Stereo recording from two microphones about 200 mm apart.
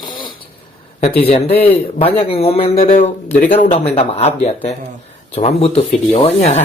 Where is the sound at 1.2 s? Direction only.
30° left (ahead or behind).